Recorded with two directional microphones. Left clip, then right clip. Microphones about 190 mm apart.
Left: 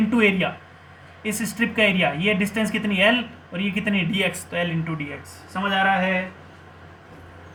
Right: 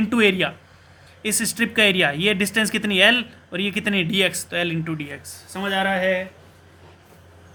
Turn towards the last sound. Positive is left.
turn(degrees=-30)  # may be behind; listen again after turning